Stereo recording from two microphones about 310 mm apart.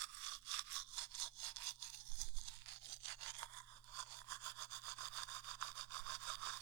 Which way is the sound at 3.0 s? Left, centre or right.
Right.